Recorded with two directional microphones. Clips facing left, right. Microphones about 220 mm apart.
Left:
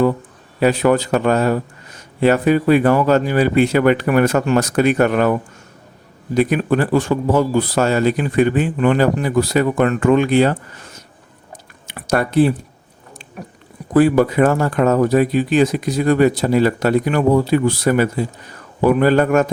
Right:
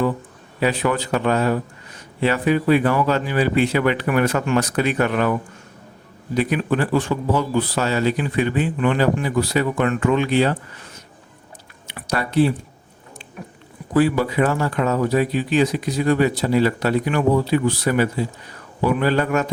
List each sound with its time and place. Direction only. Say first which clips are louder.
0.6 s a man's voice: left 6 dB; 45° left (ahead or behind)
11.9 s a sound: left 6 dB; 45° left (ahead or behind)
13.9 s a man's voice: left 5 dB; 45° left (ahead or behind)